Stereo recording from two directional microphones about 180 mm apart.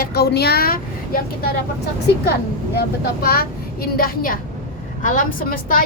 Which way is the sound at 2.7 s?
60° left (ahead or behind).